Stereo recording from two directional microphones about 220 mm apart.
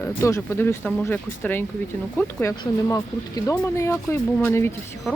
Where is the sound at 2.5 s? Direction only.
15° left (ahead or behind).